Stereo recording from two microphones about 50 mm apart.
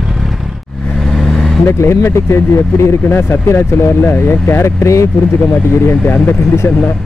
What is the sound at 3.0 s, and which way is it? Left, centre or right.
Speech, left.